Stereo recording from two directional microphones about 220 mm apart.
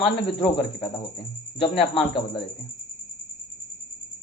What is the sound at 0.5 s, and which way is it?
Speech, 25° left (ahead or behind).